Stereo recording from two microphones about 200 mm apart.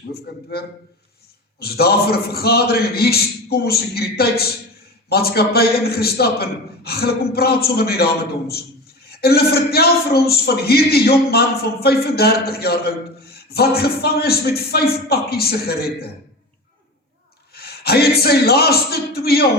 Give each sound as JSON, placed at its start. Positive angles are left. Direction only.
{"t": 0.3, "sound": "a man's voice", "side_deg": 55}
{"t": 1.5, "sound": "a man's voice", "side_deg": 50}
{"t": 17.5, "sound": "speech", "side_deg": 50}